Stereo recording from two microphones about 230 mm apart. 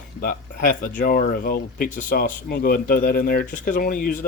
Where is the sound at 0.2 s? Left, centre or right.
Left.